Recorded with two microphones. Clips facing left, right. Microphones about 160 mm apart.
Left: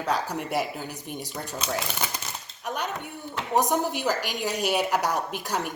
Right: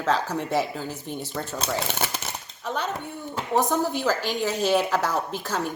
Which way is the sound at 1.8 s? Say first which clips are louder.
Right 3 dB; 25° right (ahead or behind).